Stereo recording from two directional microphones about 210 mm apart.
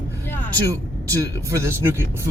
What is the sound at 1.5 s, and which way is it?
Speech, 15° right (ahead or behind).